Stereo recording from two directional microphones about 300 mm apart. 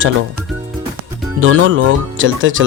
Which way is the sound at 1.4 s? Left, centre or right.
Right.